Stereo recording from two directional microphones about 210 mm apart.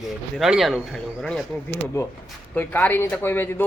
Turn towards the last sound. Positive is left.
turn(degrees=10)  # may be behind; listen again after turning